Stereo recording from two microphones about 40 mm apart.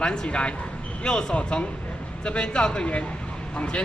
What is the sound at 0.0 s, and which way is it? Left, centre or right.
Speech, left.